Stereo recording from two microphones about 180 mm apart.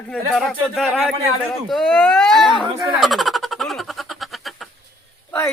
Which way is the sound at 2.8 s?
Centre (ahead or behind).